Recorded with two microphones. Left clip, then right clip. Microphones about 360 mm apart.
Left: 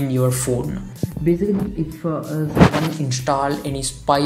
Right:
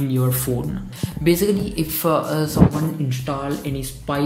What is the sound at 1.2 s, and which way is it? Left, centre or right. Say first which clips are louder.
Speech: right 2 dB; right.